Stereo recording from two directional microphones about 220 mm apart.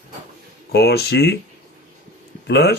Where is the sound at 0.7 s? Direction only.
45° left (ahead or behind).